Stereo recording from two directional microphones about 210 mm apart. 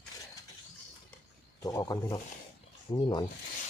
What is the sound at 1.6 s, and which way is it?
Speech, 15° left (ahead or behind).